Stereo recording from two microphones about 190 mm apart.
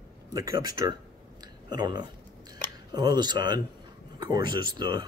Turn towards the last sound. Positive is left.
turn(degrees=-25)  # may be behind; listen again after turning